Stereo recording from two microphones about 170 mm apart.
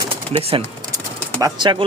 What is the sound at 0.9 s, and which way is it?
Bird, 20° right (ahead or behind).